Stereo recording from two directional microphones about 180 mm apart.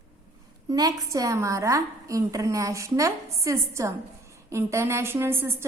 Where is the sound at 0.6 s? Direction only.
20° right (ahead or behind).